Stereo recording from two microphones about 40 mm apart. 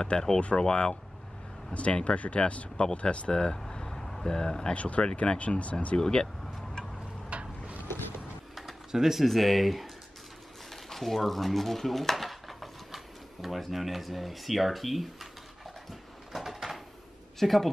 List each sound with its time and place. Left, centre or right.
0.1 s speech: left
1.7 s speech: left; by 4.7 s centre
4.7 s speech: left
5.9 s speech: centre
7.2 s a sound: right
8.9 s speech: centre
10.7 s dishes: centre
16.3 s a sound: centre
17.4 s speech: centre